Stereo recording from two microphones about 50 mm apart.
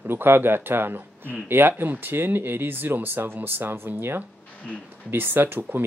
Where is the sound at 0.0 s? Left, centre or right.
Right.